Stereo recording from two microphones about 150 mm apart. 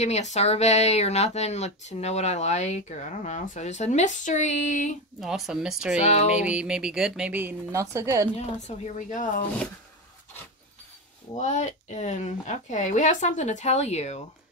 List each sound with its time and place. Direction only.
0.0 s speech: 50° left (ahead or behind)
5.2 s speech: 5° right (ahead or behind)
5.9 s speech: 45° left (ahead or behind)
6.3 s speech: 5° right (ahead or behind)
8.4 s speech: 50° left (ahead or behind)
11.3 s speech: 50° left (ahead or behind)